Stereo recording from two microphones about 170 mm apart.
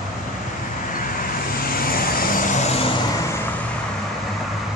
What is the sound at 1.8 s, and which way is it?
Vehicle, 60° left (ahead or behind).